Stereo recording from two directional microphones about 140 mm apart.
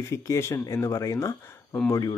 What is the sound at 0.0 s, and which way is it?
Speech, 20° left (ahead or behind).